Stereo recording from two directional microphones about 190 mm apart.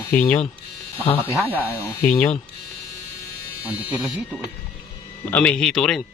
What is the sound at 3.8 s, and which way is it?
Speech, 5° right (ahead or behind).